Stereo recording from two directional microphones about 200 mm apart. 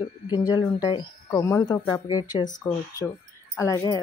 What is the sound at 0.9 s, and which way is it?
Speech, 15° left (ahead or behind).